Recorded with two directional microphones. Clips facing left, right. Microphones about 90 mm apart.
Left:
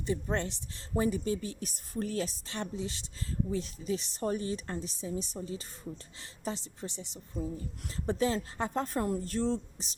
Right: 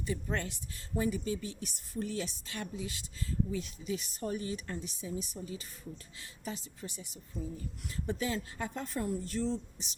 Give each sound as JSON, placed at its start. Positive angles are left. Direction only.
{"t": 0.0, "sound": "a woman's voice", "side_deg": 25}
{"t": 0.9, "sound": "a woman's voice", "side_deg": 40}
{"t": 2.6, "sound": "a woman's voice", "side_deg": 30}
{"t": 4.2, "sound": "a woman's voice", "side_deg": 40}
{"t": 7.9, "sound": "a woman's voice", "side_deg": 35}